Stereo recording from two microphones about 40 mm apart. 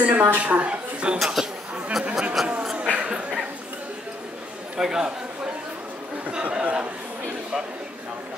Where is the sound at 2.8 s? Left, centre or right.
Right.